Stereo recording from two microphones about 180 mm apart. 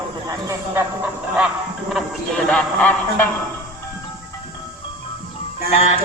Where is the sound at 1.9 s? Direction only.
5° left (ahead or behind).